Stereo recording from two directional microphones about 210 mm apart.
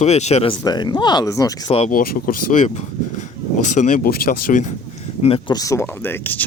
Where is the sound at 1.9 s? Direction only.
45° left (ahead or behind).